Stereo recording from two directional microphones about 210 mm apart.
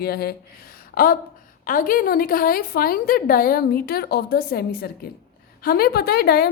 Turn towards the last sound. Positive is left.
turn(degrees=45)  # may be behind; listen again after turning